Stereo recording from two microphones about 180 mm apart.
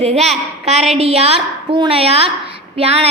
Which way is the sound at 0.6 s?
35° right (ahead or behind).